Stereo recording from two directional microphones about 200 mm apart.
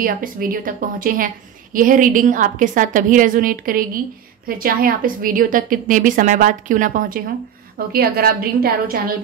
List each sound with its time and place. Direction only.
0.0 s a woman's voice: 45° right (ahead or behind)